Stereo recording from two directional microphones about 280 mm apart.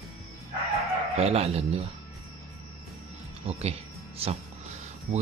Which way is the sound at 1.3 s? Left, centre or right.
Right.